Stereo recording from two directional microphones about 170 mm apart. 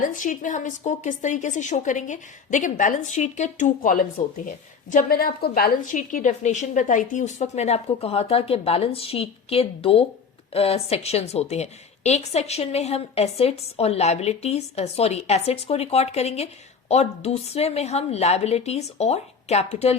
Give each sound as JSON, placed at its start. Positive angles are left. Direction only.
{"t": 0.0, "sound": "a woman's voice", "side_deg": 50}